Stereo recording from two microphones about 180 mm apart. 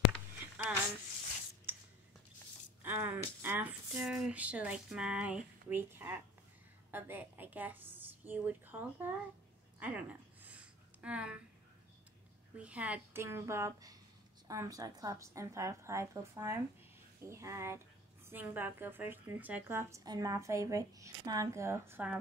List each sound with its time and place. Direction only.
1.7 s squish: 10° right (ahead or behind)
2.8 s a woman's voice: 10° right (ahead or behind)
9.8 s a sound: 10° right (ahead or behind)
12.5 s a woman's voice: 5° right (ahead or behind)